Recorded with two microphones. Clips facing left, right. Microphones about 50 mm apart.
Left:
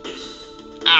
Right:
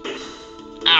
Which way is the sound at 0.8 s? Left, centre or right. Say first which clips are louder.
Left 1 dB; centre.